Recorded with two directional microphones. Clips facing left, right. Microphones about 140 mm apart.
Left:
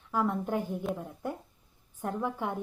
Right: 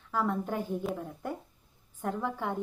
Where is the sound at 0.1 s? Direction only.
15° left (ahead or behind).